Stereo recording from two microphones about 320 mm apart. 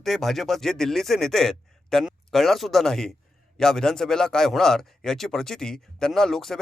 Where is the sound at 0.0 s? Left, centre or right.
Centre.